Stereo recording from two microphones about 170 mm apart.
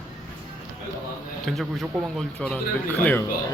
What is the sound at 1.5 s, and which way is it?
Speech, centre (ahead or behind).